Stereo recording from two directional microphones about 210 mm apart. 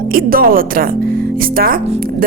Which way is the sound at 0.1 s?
45° right (ahead or behind).